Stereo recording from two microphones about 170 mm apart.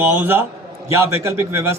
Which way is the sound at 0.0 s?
10° right (ahead or behind).